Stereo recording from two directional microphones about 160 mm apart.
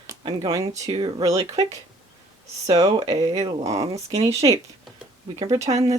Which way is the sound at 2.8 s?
35° right (ahead or behind).